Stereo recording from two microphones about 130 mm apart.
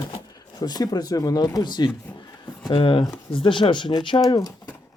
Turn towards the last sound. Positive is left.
turn(degrees=30)  # may be behind; listen again after turning